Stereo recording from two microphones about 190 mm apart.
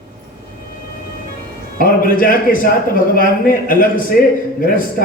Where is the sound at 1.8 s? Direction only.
50° left (ahead or behind).